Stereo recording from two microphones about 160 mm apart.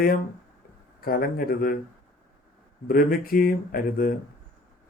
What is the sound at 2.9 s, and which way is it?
Speech, 65° left (ahead or behind).